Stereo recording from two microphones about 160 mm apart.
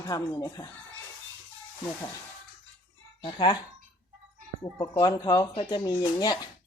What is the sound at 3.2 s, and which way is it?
Speech, 25° left (ahead or behind).